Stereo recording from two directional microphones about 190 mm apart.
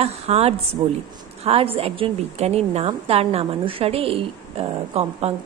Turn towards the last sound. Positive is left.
turn(degrees=-30)  # may be behind; listen again after turning